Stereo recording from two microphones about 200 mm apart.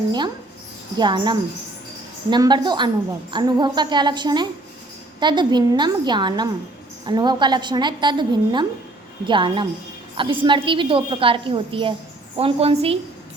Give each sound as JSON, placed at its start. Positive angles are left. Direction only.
{"t": 0.9, "sound": "a woman's voice", "side_deg": -20}